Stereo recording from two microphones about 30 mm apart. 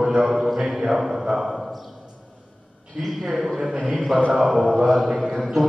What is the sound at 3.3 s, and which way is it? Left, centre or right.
A man's voice, centre.